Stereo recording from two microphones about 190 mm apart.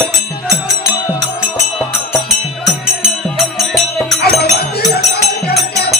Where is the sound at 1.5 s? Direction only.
Centre (ahead or behind).